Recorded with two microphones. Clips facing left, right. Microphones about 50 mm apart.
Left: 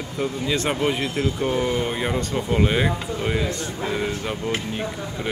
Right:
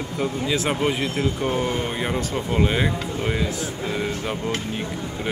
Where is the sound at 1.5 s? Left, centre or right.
Right.